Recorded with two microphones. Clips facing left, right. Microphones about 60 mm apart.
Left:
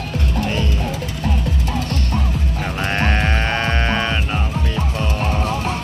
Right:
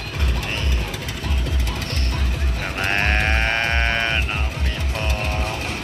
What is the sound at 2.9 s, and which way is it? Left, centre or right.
Music, centre.